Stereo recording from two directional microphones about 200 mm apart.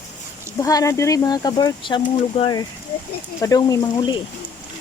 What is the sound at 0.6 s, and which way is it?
Speech, 15° left (ahead or behind).